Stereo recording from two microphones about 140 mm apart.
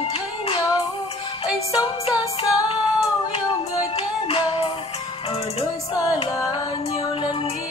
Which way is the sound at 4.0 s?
40° left (ahead or behind).